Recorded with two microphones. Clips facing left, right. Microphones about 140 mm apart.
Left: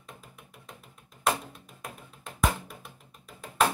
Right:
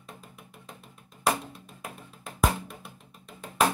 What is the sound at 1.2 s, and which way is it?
Music, centre (ahead or behind).